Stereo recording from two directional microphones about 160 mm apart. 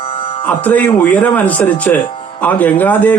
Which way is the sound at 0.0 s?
35° left (ahead or behind).